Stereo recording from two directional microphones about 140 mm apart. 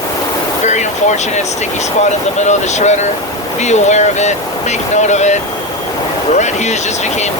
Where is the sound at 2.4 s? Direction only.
55° left (ahead or behind).